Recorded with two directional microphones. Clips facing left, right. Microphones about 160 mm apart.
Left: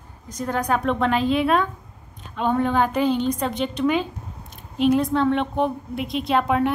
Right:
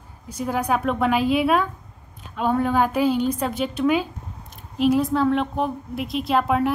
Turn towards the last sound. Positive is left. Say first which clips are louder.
# even
turn(degrees=0)  # may be behind; listen again after turning